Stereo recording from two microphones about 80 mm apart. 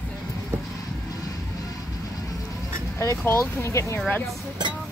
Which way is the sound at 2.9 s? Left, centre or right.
Left.